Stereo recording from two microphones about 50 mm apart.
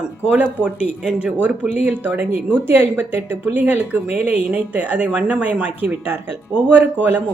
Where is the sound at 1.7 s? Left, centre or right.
Right.